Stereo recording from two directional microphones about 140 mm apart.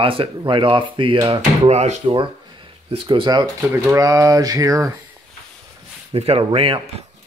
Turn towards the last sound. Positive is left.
turn(degrees=-40)  # may be behind; listen again after turning